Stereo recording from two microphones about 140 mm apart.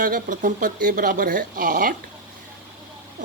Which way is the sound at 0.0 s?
75° right (ahead or behind).